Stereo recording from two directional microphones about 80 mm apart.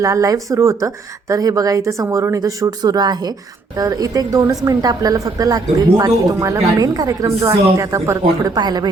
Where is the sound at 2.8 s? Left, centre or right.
Right.